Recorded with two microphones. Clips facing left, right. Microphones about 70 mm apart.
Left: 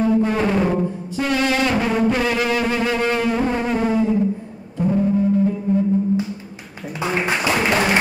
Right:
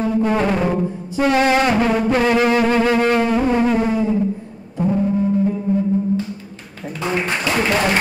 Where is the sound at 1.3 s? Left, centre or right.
Right.